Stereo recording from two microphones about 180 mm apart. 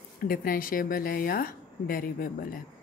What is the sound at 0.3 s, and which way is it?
A woman's voice, 55° left (ahead or behind).